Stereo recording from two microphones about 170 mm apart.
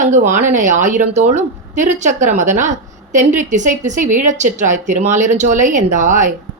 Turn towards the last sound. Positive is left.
turn(degrees=-45)  # may be behind; listen again after turning